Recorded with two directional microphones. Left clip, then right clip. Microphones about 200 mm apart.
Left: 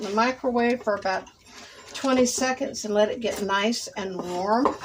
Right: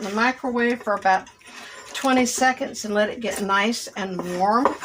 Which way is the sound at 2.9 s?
15° right (ahead or behind).